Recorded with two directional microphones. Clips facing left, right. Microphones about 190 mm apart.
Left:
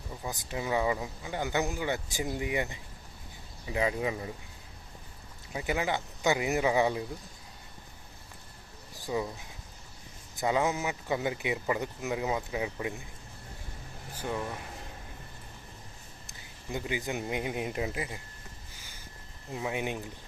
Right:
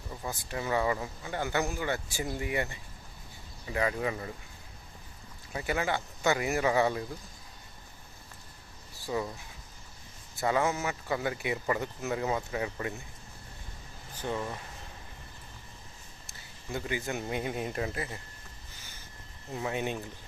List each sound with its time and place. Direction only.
0.3 s speech: 15° left (ahead or behind)
5.5 s speech: 15° left (ahead or behind)
9.0 s speech: 15° left (ahead or behind)
10.3 s speech: 15° left (ahead or behind)
14.2 s speech: 10° left (ahead or behind)
16.2 s speech: 15° left (ahead or behind)
19.5 s speech: 10° left (ahead or behind)